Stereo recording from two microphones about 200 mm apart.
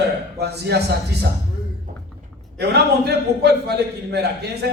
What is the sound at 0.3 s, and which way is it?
Speech, 55° right (ahead or behind).